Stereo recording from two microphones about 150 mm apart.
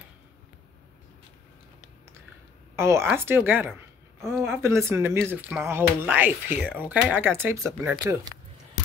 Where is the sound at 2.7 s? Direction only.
15° right (ahead or behind).